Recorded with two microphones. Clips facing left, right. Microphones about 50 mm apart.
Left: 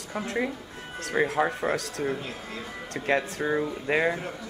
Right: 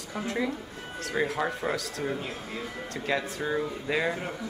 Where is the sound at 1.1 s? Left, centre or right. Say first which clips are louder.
Left 4 dB; left.